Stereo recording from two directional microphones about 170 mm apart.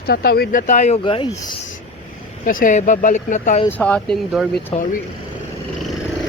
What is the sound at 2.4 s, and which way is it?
Speech, 50° left (ahead or behind).